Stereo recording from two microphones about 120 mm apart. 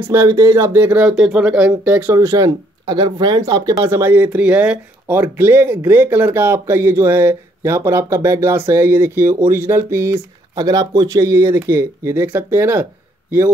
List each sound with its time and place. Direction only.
0.0 s speech: 20° right (ahead or behind)
2.1 s speech: 30° right (ahead or behind)